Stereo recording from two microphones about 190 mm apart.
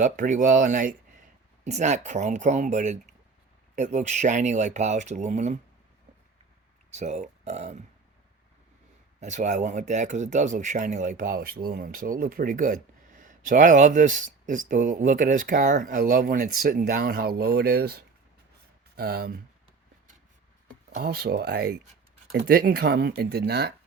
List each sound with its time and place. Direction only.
0.0 s speech: 45° right (ahead or behind)
6.9 s speech: 35° right (ahead or behind)
9.2 s speech: 40° right (ahead or behind)
20.9 s speech: 55° right (ahead or behind)